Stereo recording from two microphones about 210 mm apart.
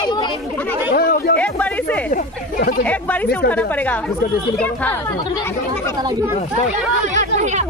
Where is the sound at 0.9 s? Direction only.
45° left (ahead or behind).